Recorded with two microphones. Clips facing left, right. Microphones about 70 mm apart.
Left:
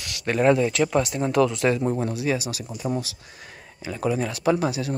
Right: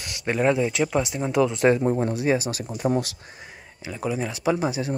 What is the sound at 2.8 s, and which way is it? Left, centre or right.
Speech, right.